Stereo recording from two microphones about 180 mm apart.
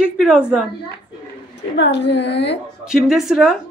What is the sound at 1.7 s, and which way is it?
Speech, 75° left (ahead or behind).